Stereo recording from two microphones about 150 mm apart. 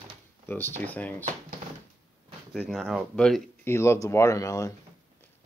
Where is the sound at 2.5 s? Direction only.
Centre (ahead or behind).